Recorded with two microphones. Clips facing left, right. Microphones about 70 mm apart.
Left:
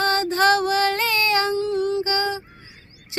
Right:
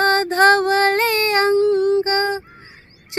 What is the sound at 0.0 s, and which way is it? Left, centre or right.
Female singing, right.